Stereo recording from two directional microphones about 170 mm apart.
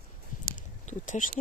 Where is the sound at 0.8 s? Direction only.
45° left (ahead or behind).